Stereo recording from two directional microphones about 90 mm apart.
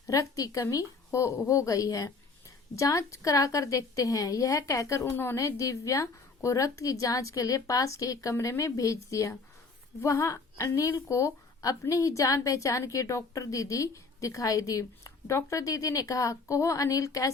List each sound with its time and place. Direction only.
0.1 s a woman's voice: 40° left (ahead or behind)